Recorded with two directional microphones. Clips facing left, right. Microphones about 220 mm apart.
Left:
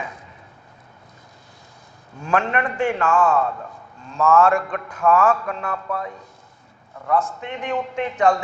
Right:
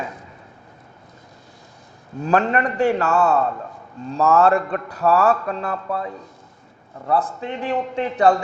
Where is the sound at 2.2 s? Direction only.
35° right (ahead or behind).